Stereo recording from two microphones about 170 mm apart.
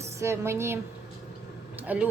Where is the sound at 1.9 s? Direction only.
10° right (ahead or behind).